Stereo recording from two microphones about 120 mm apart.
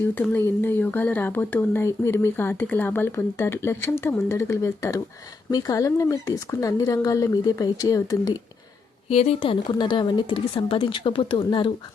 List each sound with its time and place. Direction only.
0.0 s speech: 15° left (ahead or behind)
9.0 s speech: 60° left (ahead or behind)